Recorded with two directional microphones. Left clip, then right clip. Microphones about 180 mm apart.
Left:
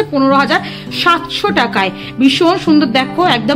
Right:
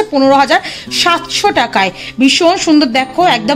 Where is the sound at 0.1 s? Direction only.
30° right (ahead or behind).